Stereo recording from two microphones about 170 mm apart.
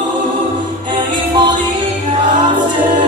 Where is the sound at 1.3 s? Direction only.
25° right (ahead or behind).